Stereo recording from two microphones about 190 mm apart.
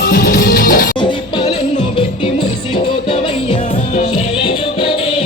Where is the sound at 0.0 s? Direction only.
45° left (ahead or behind).